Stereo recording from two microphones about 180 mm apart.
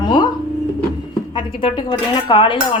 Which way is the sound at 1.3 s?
30° left (ahead or behind).